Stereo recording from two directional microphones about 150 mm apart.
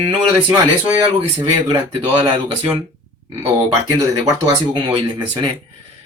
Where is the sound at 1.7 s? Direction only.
30° right (ahead or behind).